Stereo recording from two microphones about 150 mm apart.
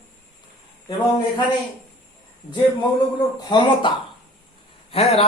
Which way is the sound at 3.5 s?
30° left (ahead or behind).